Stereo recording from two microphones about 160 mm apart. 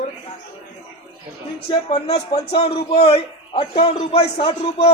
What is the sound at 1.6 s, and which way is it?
A man's voice, 40° left (ahead or behind).